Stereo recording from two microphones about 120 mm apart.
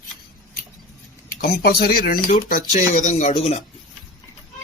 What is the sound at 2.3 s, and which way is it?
Speech, 90° left.